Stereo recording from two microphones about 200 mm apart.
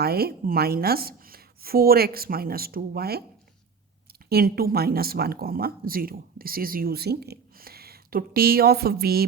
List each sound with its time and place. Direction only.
0.0 s speech: 50° right (ahead or behind)
4.3 s speech: 50° right (ahead or behind)